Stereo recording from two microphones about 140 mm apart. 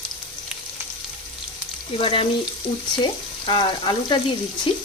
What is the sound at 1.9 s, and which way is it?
Frying, 40° left (ahead or behind).